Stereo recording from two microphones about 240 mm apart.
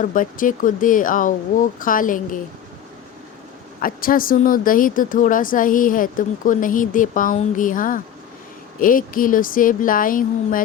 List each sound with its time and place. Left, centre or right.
0.0 s speech: left
3.8 s speech: left